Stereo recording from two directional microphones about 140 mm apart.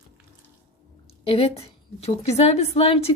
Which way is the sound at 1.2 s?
45° left (ahead or behind).